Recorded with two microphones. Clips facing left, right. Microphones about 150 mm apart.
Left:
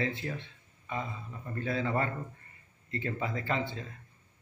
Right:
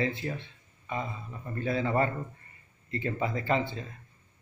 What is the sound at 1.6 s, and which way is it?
Speech, 20° right (ahead or behind).